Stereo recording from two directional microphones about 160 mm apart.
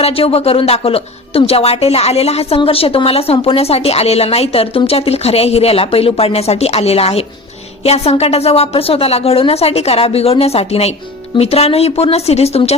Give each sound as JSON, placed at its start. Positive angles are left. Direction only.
{"t": 0.0, "sound": "speech", "side_deg": 40}